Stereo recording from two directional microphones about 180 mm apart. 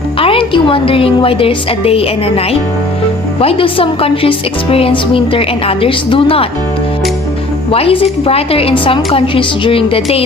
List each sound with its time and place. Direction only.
0.2 s a woman's voice: 30° left (ahead or behind)
7.7 s a woman's voice: 30° left (ahead or behind)